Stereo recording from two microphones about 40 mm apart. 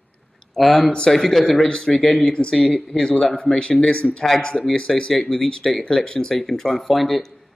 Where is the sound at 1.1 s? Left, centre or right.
Centre.